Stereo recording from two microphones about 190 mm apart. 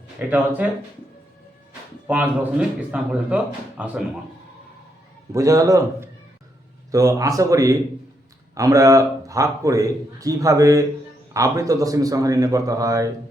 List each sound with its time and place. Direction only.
0.2 s a man's voice: 10° right (ahead or behind)
2.0 s a man's voice: 10° right (ahead or behind)
5.3 s a man's voice: 15° right (ahead or behind)